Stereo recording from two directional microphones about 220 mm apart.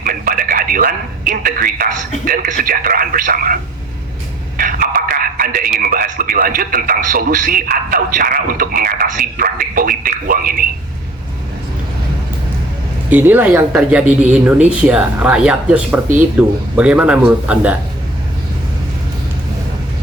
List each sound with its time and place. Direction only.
0.0 s a man's voice: 40° right (ahead or behind)
13.1 s speech: 10° right (ahead or behind)